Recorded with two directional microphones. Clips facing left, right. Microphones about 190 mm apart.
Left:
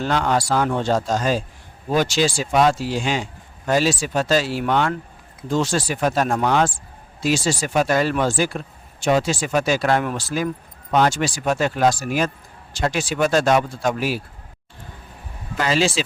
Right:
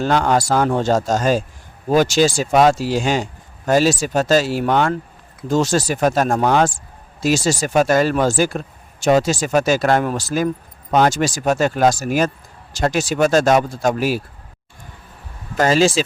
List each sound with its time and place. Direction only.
0.0 s speech: 45° right (ahead or behind)
15.5 s speech: 45° right (ahead or behind)